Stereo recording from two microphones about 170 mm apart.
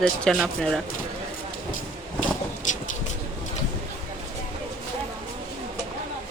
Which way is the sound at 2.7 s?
45° left (ahead or behind).